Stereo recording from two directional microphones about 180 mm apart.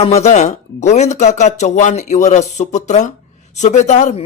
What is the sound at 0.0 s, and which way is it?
Speech, 35° left (ahead or behind).